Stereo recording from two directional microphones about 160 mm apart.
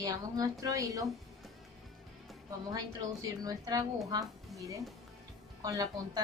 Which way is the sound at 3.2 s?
25° right (ahead or behind).